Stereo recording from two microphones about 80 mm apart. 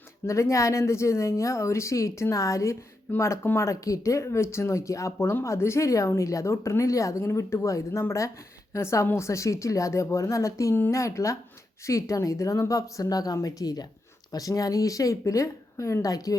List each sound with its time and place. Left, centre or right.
0.3 s speech: left
3.7 s speech: left